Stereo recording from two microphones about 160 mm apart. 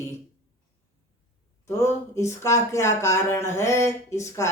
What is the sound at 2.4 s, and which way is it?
Speech, 20° left (ahead or behind).